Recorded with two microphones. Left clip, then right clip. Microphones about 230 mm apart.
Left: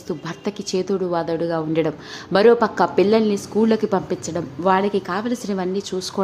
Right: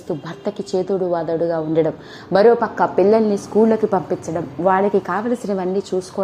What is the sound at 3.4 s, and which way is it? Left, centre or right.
A woman's voice, centre.